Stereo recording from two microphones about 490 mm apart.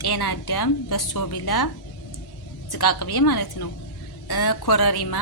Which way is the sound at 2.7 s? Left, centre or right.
Left.